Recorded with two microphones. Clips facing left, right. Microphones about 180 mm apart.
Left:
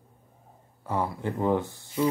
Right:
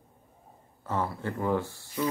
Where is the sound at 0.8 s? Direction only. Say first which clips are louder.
Left 2 dB; 15° left (ahead or behind).